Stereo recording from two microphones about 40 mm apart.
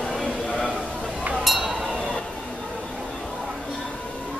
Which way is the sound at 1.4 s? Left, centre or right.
Centre.